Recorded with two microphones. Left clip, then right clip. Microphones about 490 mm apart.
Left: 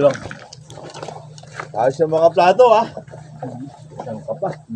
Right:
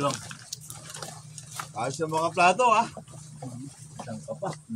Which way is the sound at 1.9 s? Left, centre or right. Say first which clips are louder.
Left 10 dB; right.